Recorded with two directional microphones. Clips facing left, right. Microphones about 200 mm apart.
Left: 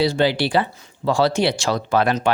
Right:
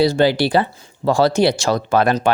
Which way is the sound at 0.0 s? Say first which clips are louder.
Right 4 dB; 45° right (ahead or behind).